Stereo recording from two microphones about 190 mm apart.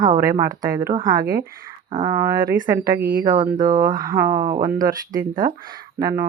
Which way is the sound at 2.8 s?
50° right (ahead or behind).